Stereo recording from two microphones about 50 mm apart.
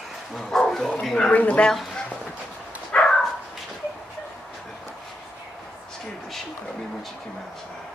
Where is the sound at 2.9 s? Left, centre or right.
Left.